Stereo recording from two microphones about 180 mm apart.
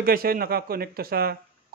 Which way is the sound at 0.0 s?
55° right (ahead or behind).